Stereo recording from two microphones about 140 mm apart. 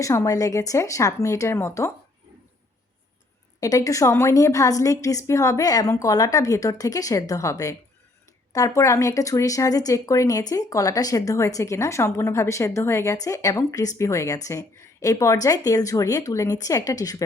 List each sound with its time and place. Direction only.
0.0 s speech: 20° left (ahead or behind)
3.6 s speech: 25° left (ahead or behind)